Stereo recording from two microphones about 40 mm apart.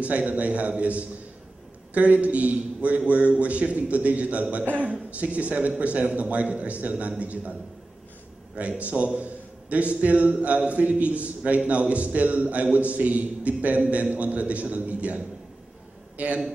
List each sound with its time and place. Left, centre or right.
0.0 s a man's voice: right
8.5 s a man's voice: right